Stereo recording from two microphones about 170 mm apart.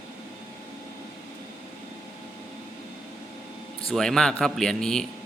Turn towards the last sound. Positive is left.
turn(degrees=5)  # may be behind; listen again after turning